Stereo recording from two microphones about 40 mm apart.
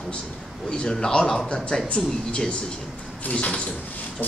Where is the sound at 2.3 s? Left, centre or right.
Left.